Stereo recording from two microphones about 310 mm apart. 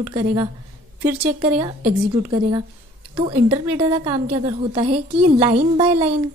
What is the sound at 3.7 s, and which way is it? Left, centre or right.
A woman's voice, centre.